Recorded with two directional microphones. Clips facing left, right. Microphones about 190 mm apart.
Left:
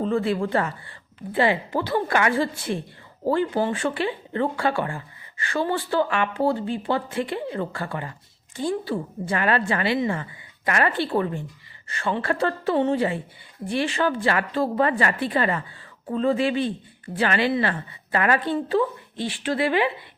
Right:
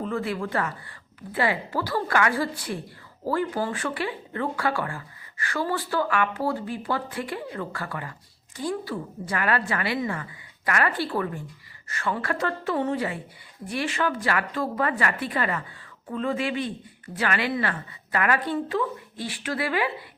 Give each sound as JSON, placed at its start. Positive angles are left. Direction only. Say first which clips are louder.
{"t": 0.0, "sound": "speech", "louder": "left 5 dB", "side_deg": 30}